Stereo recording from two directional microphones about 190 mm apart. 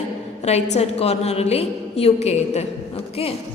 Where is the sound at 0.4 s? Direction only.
35° left (ahead or behind).